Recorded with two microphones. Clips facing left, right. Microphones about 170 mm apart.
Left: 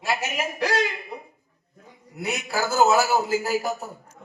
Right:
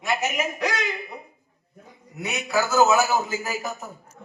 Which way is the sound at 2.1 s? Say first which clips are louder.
Right 2 dB; 30° left (ahead or behind).